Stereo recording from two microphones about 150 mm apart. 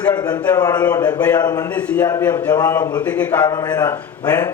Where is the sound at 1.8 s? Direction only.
10° left (ahead or behind).